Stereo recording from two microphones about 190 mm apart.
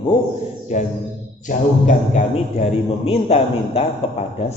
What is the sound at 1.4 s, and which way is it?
A man's voice, 40° left (ahead or behind).